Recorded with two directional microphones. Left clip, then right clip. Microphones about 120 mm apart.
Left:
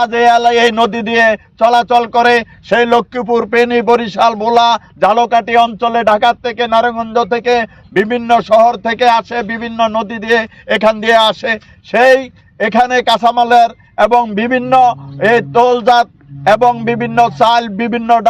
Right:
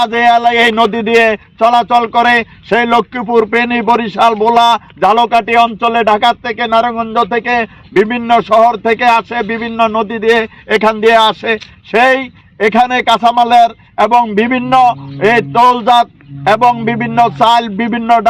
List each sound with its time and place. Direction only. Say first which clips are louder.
0.4 s speech: right 1 dB; 35° left (ahead or behind)
10.2 s speech: right 2 dB; 35° left (ahead or behind)